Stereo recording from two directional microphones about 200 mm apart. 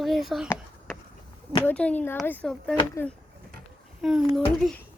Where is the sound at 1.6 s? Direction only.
5° left (ahead or behind).